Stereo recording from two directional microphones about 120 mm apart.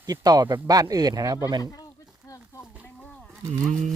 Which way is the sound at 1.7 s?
30° left (ahead or behind).